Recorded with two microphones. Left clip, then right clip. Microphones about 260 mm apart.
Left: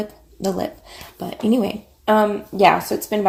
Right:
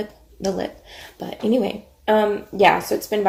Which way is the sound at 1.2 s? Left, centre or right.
Left.